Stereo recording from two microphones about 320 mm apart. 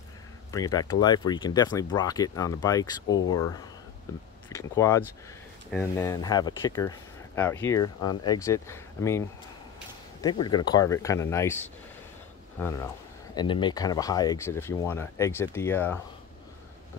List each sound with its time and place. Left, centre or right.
0.5 s speech: centre
10.2 s speech: centre